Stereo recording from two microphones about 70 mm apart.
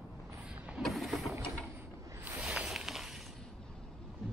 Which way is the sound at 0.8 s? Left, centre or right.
Centre.